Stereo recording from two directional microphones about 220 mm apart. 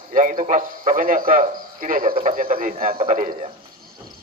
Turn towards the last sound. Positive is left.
turn(degrees=-35)  # may be behind; listen again after turning